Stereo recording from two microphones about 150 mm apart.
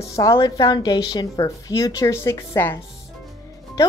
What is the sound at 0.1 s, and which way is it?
Speech, 20° left (ahead or behind).